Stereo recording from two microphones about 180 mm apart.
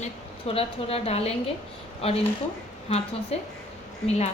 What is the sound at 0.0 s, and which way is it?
A woman's voice, 30° left (ahead or behind).